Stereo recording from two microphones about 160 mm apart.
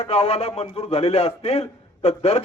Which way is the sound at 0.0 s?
40° left (ahead or behind).